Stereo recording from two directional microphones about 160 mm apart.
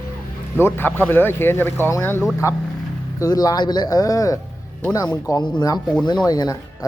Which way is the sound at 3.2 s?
25° left (ahead or behind).